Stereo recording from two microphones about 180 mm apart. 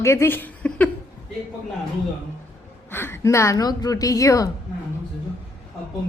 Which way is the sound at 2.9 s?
10° left (ahead or behind).